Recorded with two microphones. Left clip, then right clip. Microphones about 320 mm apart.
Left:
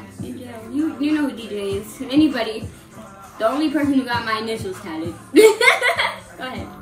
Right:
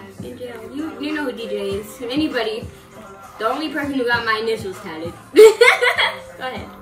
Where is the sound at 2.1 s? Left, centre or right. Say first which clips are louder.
Left 3 dB; centre.